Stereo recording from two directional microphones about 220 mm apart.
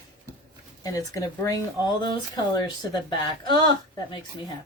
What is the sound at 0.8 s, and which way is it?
Speech, 15° left (ahead or behind).